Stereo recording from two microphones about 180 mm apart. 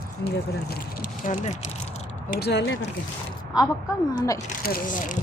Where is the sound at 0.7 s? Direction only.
50° left (ahead or behind).